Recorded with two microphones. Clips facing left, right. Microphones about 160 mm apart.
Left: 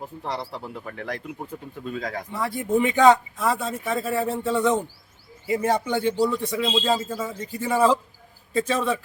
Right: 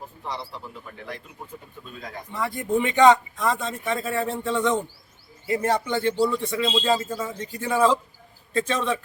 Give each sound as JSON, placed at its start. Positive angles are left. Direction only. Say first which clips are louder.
{"t": 0.2, "sound": "a man's voice", "louder": "left 3 dB", "side_deg": 85}
{"t": 2.4, "sound": "speech", "louder": "left 1 dB", "side_deg": 0}